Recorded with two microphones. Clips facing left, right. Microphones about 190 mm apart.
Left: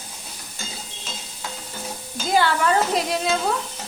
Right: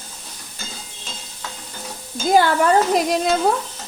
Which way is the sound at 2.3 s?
45° right (ahead or behind).